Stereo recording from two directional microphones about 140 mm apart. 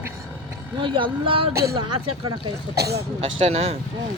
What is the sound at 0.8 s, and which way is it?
Speech, 40° right (ahead or behind).